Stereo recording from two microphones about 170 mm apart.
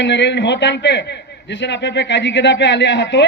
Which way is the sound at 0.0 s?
90° left.